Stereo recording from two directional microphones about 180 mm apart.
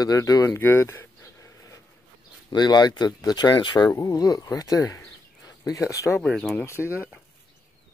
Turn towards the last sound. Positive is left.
turn(degrees=15)  # may be behind; listen again after turning